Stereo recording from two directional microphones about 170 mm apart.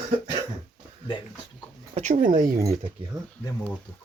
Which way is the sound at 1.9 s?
45° right (ahead or behind).